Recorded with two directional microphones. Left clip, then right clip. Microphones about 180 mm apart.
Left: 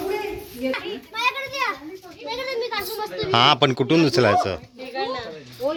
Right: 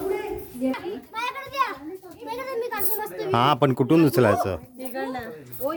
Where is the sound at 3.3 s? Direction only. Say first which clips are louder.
Left 3 dB; 20° right (ahead or behind).